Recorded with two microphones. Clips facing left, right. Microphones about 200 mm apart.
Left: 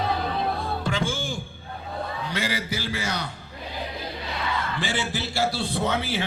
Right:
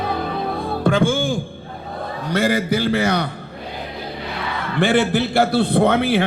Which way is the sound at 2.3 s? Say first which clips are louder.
Right 13 dB; 55° right (ahead or behind).